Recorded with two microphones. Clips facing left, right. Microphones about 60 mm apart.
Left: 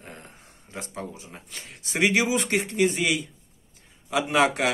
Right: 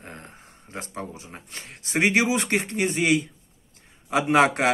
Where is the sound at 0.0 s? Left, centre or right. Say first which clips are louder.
Right 2 dB; right.